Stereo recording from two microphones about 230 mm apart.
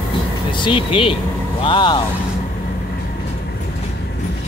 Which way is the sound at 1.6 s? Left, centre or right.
Left.